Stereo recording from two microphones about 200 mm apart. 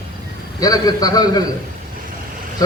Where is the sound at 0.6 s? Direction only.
20° left (ahead or behind).